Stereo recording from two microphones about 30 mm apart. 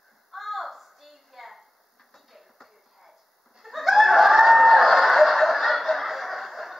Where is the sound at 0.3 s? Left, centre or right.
Centre.